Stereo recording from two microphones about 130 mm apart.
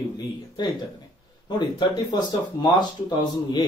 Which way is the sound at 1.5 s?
35° left (ahead or behind).